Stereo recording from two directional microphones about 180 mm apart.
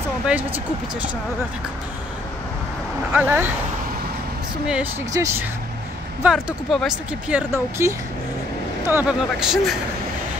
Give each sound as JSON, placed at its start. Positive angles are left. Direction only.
{"t": 0.3, "sound": "speech", "side_deg": -10}
{"t": 3.1, "sound": "speech", "side_deg": -10}
{"t": 5.1, "sound": "speech", "side_deg": -15}
{"t": 6.2, "sound": "speech", "side_deg": 0}